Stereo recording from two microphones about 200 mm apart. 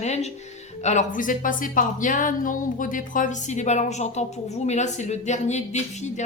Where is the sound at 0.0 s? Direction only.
35° left (ahead or behind).